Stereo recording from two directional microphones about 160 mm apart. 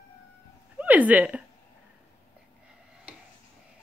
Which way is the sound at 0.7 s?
10° right (ahead or behind).